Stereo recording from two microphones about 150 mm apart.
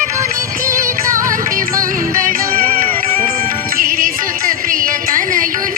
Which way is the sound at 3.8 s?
70° right (ahead or behind).